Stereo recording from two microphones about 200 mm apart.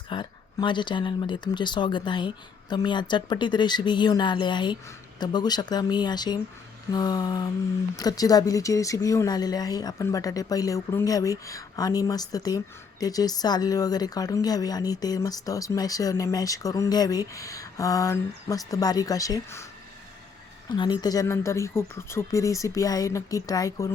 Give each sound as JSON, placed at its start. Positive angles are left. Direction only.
{"t": 0.1, "sound": "speech", "side_deg": 25}
{"t": 20.7, "sound": "speech", "side_deg": 20}